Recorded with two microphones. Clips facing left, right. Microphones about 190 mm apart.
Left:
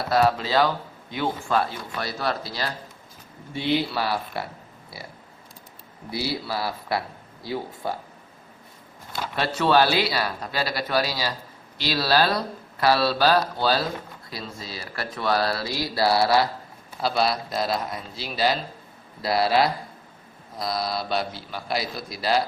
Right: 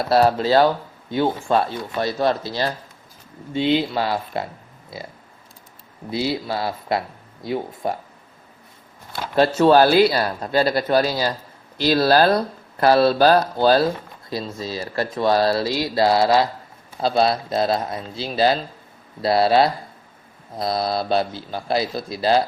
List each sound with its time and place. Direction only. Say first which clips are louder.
0.1 s speech: right 5 dB; 35° right (ahead or behind)
9.3 s speech: right 7 dB; 40° right (ahead or behind)
14.3 s speech: right 11 dB; 25° right (ahead or behind)